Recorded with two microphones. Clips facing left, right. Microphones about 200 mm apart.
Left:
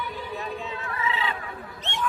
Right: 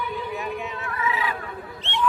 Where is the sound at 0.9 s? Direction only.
30° left (ahead or behind).